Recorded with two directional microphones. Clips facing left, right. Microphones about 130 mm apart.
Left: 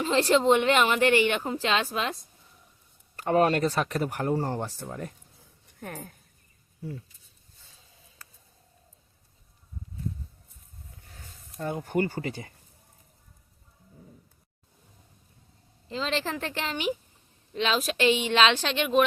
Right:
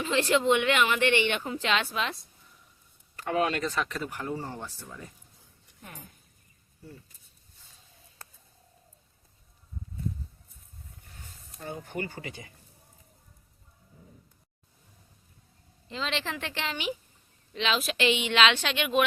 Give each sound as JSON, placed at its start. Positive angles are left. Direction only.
{"t": 0.0, "sound": "speech", "side_deg": 35}
{"t": 5.8, "sound": "speech", "side_deg": 65}
{"t": 11.8, "sound": "speech", "side_deg": 40}
{"t": 15.9, "sound": "speech", "side_deg": 35}